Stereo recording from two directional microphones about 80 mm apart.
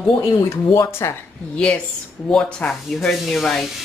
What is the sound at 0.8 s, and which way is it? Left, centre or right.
Speech, left.